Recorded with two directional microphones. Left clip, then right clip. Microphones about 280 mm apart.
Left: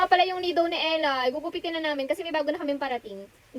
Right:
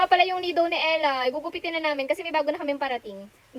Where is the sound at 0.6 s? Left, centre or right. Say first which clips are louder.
Right 2 dB; right.